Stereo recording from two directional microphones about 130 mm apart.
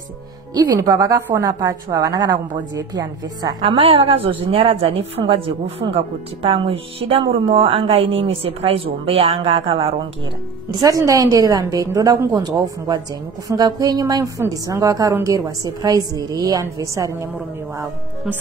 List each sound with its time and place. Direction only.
0.6 s a woman's voice: 25° right (ahead or behind)
3.6 s a woman's voice: 50° right (ahead or behind)
10.7 s a woman's voice: 25° right (ahead or behind)